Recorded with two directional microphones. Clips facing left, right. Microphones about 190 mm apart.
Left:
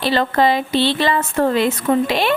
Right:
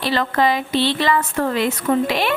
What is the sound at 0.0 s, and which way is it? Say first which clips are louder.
A woman's voice: left 2 dB; 30° left (ahead or behind).